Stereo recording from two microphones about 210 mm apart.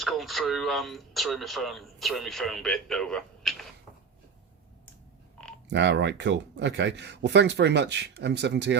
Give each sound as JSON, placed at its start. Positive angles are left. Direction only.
{"t": 0.0, "sound": "speech", "side_deg": 0}
{"t": 5.7, "sound": "speech", "side_deg": -55}